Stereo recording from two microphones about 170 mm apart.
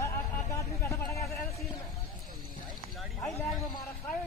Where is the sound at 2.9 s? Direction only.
Centre (ahead or behind).